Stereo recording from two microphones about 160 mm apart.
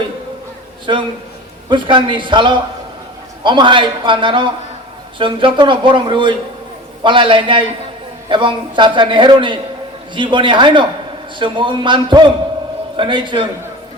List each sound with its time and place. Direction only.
0.9 s a man's voice: 30° right (ahead or behind)